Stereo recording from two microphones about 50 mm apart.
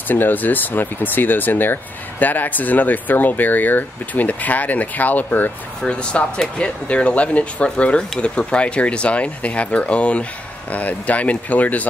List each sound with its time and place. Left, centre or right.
0.1 s speech: left
5.8 s speech: left